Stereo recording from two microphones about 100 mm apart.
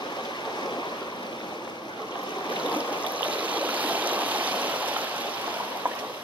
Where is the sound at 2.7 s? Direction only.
15° right (ahead or behind).